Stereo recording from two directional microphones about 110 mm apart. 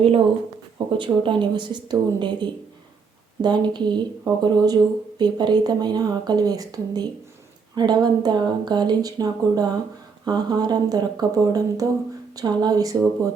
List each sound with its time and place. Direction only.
0.9 s speech: 50° right (ahead or behind); by 13.3 s 30° right (ahead or behind)